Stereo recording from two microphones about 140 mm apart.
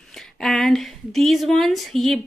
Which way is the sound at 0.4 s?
Centre (ahead or behind).